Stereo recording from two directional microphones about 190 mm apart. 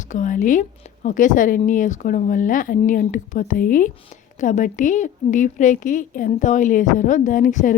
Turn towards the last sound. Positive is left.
turn(degrees=40)  # may be behind; listen again after turning